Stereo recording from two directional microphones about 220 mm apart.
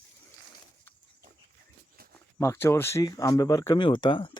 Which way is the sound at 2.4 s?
10° left (ahead or behind).